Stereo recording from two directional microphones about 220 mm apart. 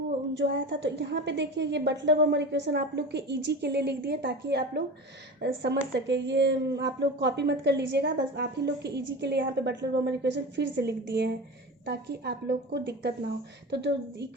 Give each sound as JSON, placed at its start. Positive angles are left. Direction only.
{"t": 0.3, "sound": "speech", "side_deg": -55}